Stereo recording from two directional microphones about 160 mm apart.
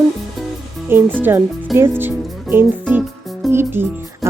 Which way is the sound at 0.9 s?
15° right (ahead or behind).